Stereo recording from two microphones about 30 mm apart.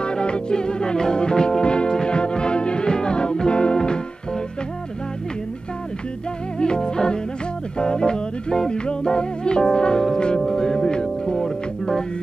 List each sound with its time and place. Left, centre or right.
0.0 s music: left
6.6 s music: left